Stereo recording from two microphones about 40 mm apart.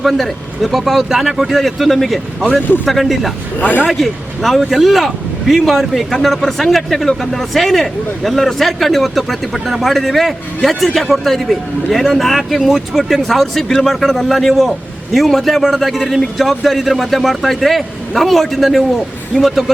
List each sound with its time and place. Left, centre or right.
0.0 s speech: centre
3.6 s speech: left
3.8 s speech: centre